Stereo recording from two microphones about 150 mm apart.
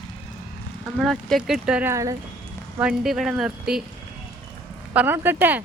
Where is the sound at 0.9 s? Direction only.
Centre (ahead or behind).